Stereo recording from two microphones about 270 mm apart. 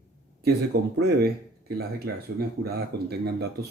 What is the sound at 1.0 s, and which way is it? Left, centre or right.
Speech, right.